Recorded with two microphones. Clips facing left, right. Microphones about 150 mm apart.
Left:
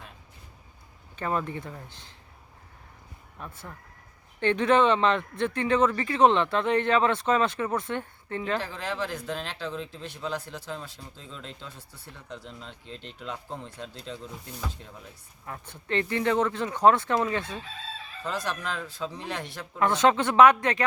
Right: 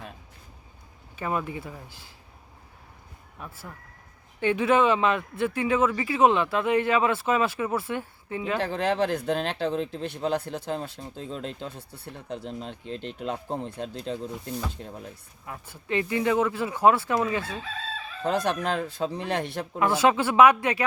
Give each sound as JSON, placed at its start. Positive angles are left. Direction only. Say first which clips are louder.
{"t": 1.1, "sound": "speech", "louder": "even", "side_deg": -10}
{"t": 3.3, "sound": "speech", "louder": "even", "side_deg": -5}
{"t": 8.6, "sound": "speech", "louder": "right 8 dB", "side_deg": -60}
{"t": 15.4, "sound": "speech", "louder": "right 1 dB", "side_deg": -5}
{"t": 18.2, "sound": "speech", "louder": "right 7 dB", "side_deg": -60}
{"t": 19.8, "sound": "speech", "louder": "even", "side_deg": -10}